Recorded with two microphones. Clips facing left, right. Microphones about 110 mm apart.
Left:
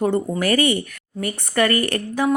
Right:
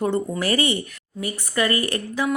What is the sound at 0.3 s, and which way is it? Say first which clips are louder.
A woman's voice: left 3 dB; 50° left (ahead or behind).